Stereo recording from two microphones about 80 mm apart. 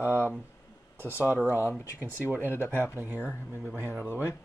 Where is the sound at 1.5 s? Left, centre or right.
Left.